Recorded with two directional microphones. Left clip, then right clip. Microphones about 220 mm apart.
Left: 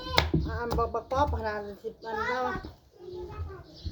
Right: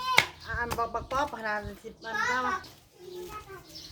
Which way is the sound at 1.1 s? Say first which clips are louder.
Left 2 dB; 45° left (ahead or behind).